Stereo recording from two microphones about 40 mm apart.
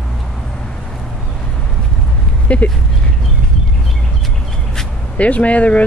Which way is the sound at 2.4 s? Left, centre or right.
Left.